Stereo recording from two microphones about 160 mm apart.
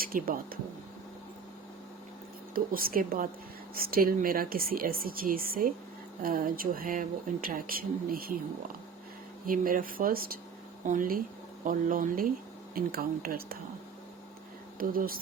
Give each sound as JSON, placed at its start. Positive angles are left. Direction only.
{"t": 0.0, "sound": "speech", "side_deg": -65}
{"t": 2.7, "sound": "speech", "side_deg": -65}
{"t": 9.5, "sound": "speech", "side_deg": -60}
{"t": 14.8, "sound": "speech", "side_deg": -65}